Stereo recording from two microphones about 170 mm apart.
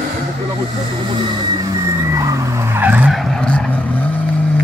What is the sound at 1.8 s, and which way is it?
Vehicle, 20° right (ahead or behind).